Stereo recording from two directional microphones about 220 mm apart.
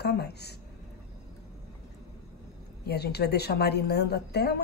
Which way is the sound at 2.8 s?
45° left (ahead or behind).